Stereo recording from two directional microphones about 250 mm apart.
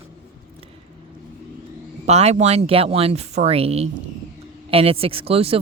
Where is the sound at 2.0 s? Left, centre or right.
Right.